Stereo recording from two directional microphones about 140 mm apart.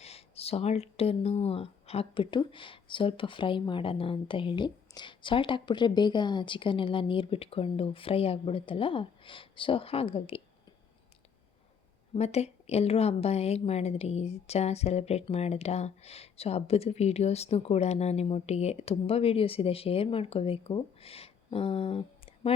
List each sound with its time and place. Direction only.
0.0 s speech: 45° left (ahead or behind)
12.1 s a woman's voice: 50° left (ahead or behind)